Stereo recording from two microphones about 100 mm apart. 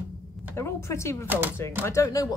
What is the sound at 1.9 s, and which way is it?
Speech, 30° left (ahead or behind).